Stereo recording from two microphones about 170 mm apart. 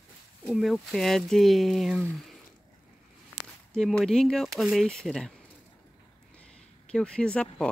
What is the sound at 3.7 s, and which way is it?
Speech, 5° left (ahead or behind).